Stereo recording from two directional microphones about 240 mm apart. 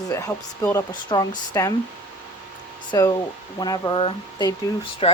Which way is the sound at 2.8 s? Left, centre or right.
Centre.